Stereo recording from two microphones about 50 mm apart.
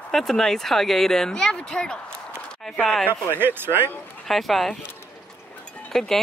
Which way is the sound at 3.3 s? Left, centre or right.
Right.